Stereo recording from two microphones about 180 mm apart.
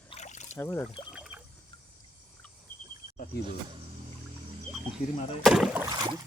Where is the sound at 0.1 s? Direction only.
40° left (ahead or behind).